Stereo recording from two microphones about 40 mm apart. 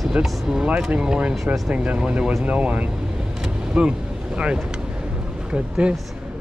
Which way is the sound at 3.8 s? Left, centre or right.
Right.